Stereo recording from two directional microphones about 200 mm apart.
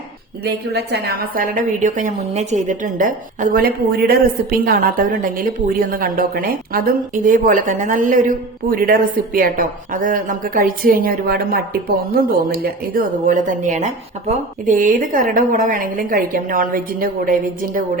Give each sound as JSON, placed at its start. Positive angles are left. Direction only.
{"t": 0.4, "sound": "a woman's voice", "side_deg": -55}